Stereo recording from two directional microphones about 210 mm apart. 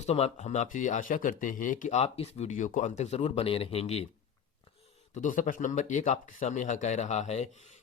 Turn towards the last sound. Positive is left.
turn(degrees=30)  # may be behind; listen again after turning